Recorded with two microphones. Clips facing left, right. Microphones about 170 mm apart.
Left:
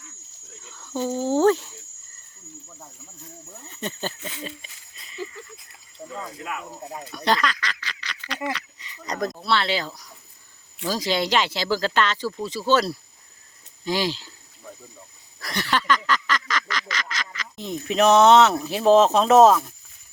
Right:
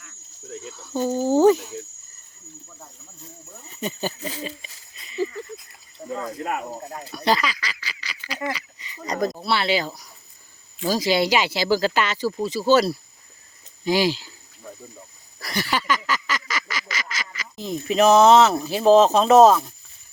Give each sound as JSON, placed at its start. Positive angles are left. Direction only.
{"t": 0.6, "sound": "speech", "side_deg": -10}
{"t": 3.8, "sound": "speech", "side_deg": -10}
{"t": 4.2, "sound": "speech", "side_deg": -35}
{"t": 5.0, "sound": "a sound", "side_deg": 0}
{"t": 6.1, "sound": "speech", "side_deg": -45}
{"t": 7.1, "sound": "speech", "side_deg": -5}
{"t": 8.4, "sound": "a sound", "side_deg": -5}
{"t": 9.4, "sound": "speech", "side_deg": -10}
{"t": 15.4, "sound": "duck", "side_deg": -5}